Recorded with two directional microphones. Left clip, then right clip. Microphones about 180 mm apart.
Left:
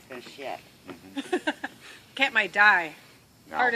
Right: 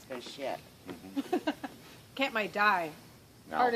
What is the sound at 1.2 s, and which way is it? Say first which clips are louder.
A woman's voice: left 4 dB; 15° right (ahead or behind).